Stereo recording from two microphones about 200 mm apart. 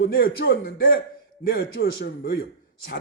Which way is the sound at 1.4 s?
55° left (ahead or behind).